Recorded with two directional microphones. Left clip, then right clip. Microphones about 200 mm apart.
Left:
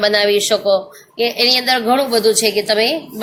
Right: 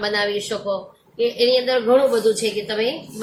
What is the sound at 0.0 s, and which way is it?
Speech, 40° left (ahead or behind).